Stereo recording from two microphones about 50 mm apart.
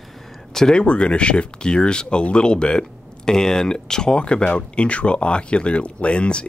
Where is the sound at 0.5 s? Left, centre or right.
Centre.